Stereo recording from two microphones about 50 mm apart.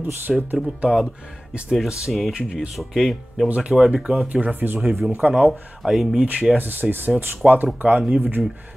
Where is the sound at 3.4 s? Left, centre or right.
Right.